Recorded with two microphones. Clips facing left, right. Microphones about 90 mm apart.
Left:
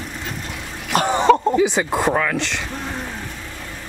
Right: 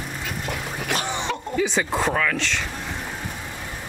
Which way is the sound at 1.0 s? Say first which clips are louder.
Left 12 dB; 40° left (ahead or behind).